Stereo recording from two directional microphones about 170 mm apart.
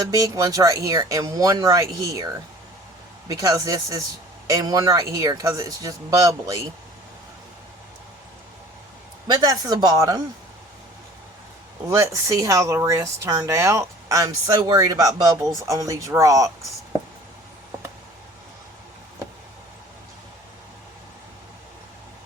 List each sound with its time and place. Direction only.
0.0 s speech: 20° right (ahead or behind)
9.2 s speech: 25° right (ahead or behind)
11.9 s speech: 20° right (ahead or behind)